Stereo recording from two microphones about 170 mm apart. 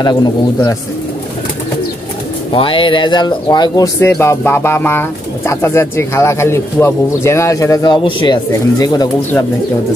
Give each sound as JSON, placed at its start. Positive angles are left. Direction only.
{"t": 0.0, "sound": "a man's voice", "side_deg": 25}
{"t": 2.5, "sound": "speech", "side_deg": 30}